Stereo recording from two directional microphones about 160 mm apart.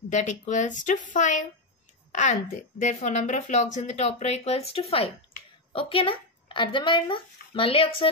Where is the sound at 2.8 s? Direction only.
50° left (ahead or behind); by 8.1 s 35° left (ahead or behind).